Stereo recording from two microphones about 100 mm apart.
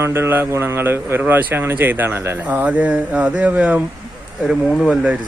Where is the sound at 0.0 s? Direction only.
25° right (ahead or behind).